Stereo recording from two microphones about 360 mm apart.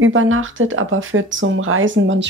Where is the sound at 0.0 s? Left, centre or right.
Right.